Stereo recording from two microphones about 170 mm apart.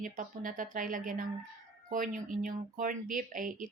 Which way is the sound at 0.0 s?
50° right (ahead or behind).